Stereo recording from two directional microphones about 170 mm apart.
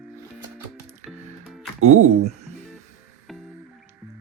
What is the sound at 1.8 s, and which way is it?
Speech, 45° right (ahead or behind).